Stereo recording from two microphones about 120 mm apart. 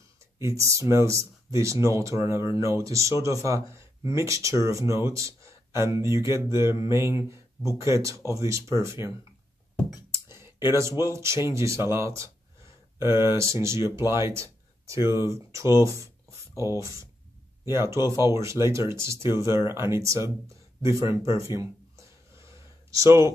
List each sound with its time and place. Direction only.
0.4 s speech: 25° right (ahead or behind)
10.1 s speech: 20° right (ahead or behind)
21.5 s a sound: 25° right (ahead or behind)